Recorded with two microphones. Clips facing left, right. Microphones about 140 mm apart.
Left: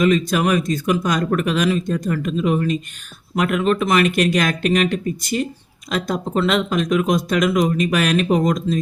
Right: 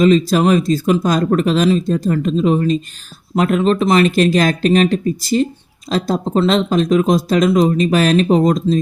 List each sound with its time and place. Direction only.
0.0 s speech: 30° right (ahead or behind)